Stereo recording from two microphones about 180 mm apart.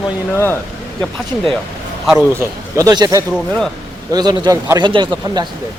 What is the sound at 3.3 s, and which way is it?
Speech, centre (ahead or behind).